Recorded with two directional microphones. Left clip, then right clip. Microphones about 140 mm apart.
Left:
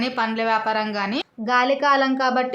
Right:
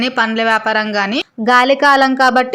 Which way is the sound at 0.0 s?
45° right (ahead or behind).